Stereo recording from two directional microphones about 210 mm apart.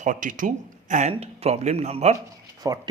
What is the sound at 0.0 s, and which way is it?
Speech, 40° right (ahead or behind).